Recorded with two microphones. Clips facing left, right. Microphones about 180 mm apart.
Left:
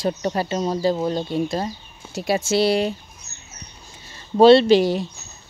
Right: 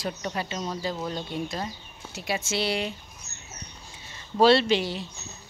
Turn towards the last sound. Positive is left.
turn(degrees=45)  # may be behind; listen again after turning